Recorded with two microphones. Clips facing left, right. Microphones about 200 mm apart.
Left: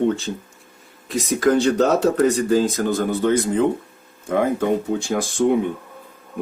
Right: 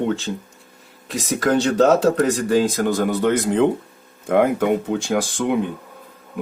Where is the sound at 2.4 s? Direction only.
65° right (ahead or behind).